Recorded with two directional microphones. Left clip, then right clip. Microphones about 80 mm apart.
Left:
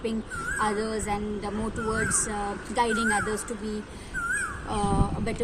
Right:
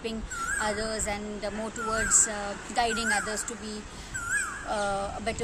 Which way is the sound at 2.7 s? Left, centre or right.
Right.